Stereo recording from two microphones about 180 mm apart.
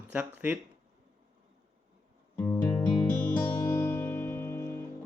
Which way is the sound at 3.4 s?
10° left (ahead or behind).